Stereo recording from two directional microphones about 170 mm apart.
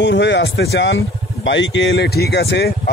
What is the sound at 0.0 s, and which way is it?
Speech, 90° left.